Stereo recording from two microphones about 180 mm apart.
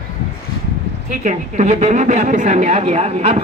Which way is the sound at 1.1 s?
45° right (ahead or behind).